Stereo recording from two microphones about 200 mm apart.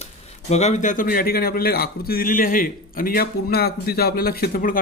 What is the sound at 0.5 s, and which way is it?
A man's voice, 35° left (ahead or behind).